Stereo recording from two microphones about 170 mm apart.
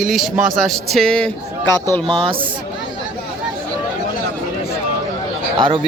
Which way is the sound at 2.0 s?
30° right (ahead or behind).